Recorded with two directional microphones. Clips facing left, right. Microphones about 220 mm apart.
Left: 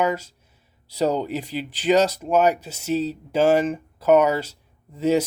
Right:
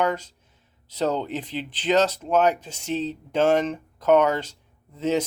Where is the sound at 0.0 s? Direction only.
10° left (ahead or behind).